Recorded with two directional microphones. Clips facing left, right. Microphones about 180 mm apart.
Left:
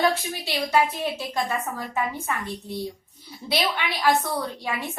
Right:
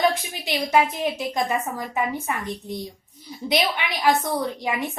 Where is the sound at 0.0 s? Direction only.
15° right (ahead or behind).